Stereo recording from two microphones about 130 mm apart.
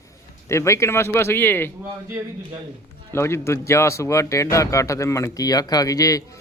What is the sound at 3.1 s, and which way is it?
Speech, 20° left (ahead or behind).